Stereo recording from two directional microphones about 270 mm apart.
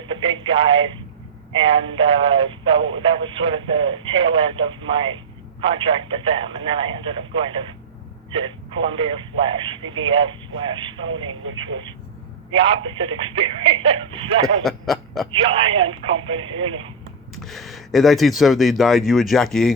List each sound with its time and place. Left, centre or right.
0.1 s a sound: centre
1.5 s speech: centre
11.4 s speech: right
12.9 s speech: centre
14.6 s speech: centre
15.3 s speech: centre
17.4 s speech: centre